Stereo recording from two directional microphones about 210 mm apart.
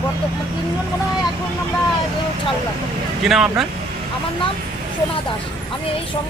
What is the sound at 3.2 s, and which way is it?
Speech, centre (ahead or behind).